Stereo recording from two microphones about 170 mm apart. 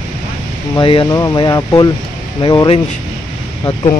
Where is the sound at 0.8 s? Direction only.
30° left (ahead or behind).